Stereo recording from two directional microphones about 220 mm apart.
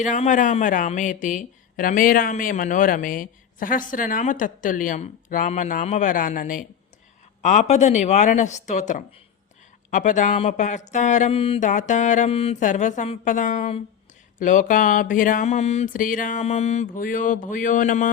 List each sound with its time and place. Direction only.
0.0 s speech: 35° left (ahead or behind)